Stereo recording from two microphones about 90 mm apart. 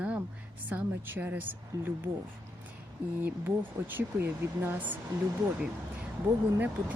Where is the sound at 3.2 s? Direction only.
20° right (ahead or behind).